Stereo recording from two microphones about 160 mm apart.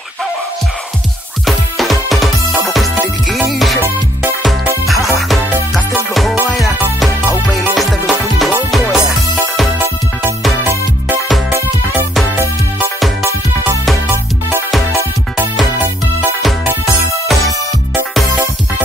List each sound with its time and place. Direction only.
1.4 s music: centre (ahead or behind)
6.6 s music: centre (ahead or behind)
10.6 s music: 10° right (ahead or behind)
16.4 s music: centre (ahead or behind)